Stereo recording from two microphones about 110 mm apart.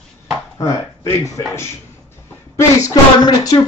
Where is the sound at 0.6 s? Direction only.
30° left (ahead or behind).